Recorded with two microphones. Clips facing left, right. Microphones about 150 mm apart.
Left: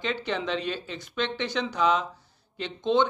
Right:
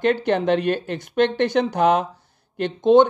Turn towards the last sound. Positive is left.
turn(degrees=-50)  # may be behind; listen again after turning